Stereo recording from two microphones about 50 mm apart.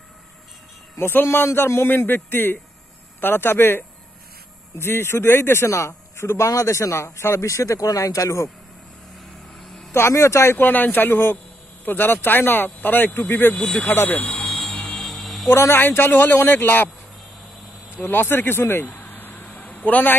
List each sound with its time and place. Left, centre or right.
0.9 s a man's voice: left
9.9 s speech: left
10.5 s speech: left
14.3 s a sound: centre
15.7 s speech: left
18.0 s speech: left
18.9 s a sound: left